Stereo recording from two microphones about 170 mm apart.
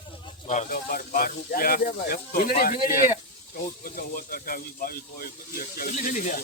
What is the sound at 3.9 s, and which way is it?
Speech, 55° left (ahead or behind).